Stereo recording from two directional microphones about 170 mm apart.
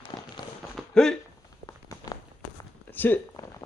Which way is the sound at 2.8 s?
10° left (ahead or behind).